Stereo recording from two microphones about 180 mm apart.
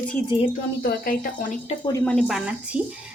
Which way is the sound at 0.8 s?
50° left (ahead or behind).